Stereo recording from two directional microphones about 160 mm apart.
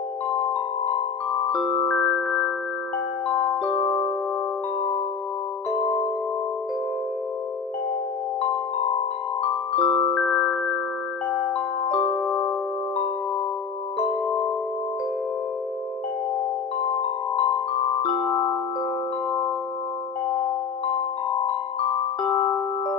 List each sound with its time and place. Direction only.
0.8 s music: 35° left (ahead or behind)
2.1 s music: 5° left (ahead or behind)
3.7 s music: 30° left (ahead or behind)
8.9 s music: 35° left (ahead or behind)
10.1 s music: 5° left (ahead or behind)
11.3 s glockenspiel: 5° left (ahead or behind)
16.9 s music: 35° left (ahead or behind)
18.2 s glockenspiel: 20° left (ahead or behind)
22.2 s music: 30° left (ahead or behind)